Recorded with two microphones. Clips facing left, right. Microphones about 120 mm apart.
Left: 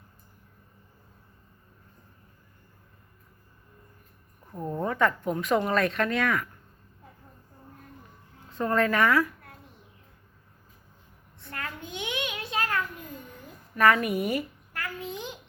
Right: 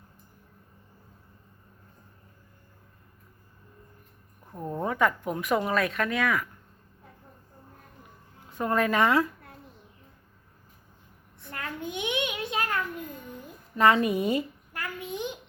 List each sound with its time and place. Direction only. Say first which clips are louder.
4.5 s speech: left 1 dB; 10° right (ahead or behind)
8.4 s speech: left 1 dB; 15° right (ahead or behind)
11.3 s a sound: right 2 dB; 15° right (ahead or behind)
13.7 s babbling: right 1 dB; 20° right (ahead or behind)